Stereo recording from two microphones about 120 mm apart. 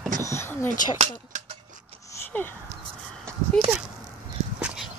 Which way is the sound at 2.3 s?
15° left (ahead or behind).